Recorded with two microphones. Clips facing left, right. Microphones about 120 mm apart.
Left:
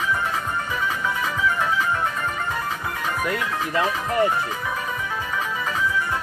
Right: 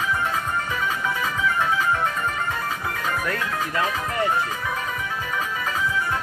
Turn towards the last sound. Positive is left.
turn(degrees=25)  # may be behind; listen again after turning